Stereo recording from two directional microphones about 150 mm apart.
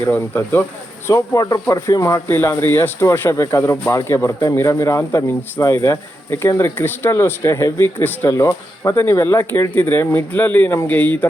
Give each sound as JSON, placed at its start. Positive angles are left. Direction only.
{"t": 0.0, "sound": "a man's voice", "side_deg": 15}